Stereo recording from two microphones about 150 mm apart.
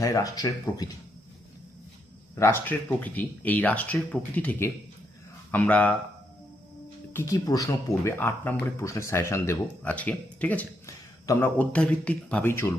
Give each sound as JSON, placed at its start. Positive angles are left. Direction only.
{"t": 0.0, "sound": "speech", "side_deg": 20}
{"t": 2.3, "sound": "speech", "side_deg": 15}
{"t": 7.1, "sound": "speech", "side_deg": 20}